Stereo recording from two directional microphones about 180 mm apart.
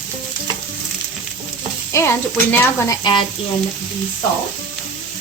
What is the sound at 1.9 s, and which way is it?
A woman's voice, 15° left (ahead or behind).